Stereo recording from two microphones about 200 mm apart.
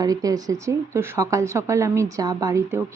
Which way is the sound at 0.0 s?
20° right (ahead or behind).